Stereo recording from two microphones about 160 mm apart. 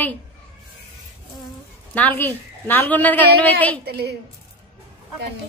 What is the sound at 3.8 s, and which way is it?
Speech, 90° right.